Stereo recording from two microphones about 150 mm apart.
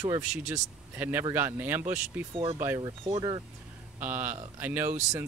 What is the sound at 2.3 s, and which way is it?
Speech, 35° right (ahead or behind).